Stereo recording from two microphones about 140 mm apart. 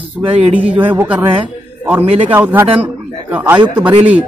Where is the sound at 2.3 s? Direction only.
15° right (ahead or behind).